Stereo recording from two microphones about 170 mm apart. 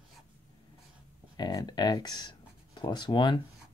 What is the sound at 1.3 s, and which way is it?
Speech, 25° left (ahead or behind).